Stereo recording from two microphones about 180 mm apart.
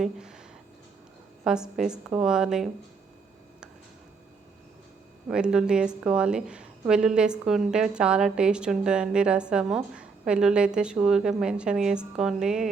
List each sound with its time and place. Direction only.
0.0 s speech: 5° right (ahead or behind)
1.5 s a woman's voice: 5° right (ahead or behind)
5.3 s a woman's voice: 5° right (ahead or behind)